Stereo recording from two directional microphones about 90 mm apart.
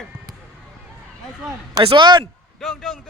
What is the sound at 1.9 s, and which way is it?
Speech, 55° right (ahead or behind).